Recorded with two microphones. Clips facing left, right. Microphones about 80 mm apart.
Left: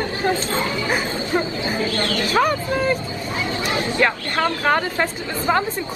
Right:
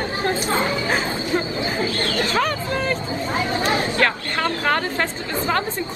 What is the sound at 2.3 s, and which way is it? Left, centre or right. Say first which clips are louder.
Speech: left 7 dB; centre.